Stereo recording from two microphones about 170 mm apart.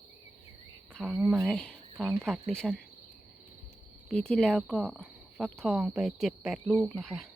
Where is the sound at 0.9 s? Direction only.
5° left (ahead or behind).